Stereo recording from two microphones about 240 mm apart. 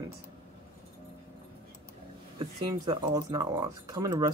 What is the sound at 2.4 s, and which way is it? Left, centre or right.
Speech, centre.